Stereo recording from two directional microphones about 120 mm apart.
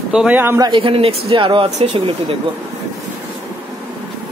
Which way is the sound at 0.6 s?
45° right (ahead or behind).